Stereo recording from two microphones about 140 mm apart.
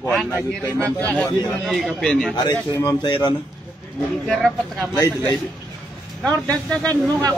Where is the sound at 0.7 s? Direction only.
20° right (ahead or behind).